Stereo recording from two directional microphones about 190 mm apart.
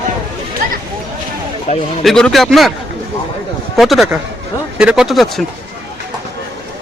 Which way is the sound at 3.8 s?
Centre (ahead or behind).